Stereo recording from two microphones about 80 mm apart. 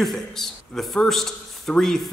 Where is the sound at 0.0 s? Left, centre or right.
Centre.